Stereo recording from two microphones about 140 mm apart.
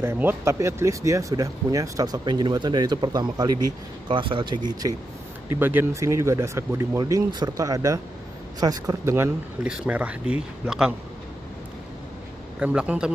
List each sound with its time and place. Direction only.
0.0 s speech: 15° right (ahead or behind); by 4.6 s 35° right (ahead or behind)
4.6 s speech: 25° right (ahead or behind)
5.5 s speech: 15° right (ahead or behind)
12.5 s speech: 5° right (ahead or behind)